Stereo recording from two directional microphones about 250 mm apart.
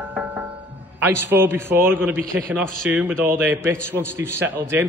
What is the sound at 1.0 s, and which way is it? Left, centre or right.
A man's voice, centre.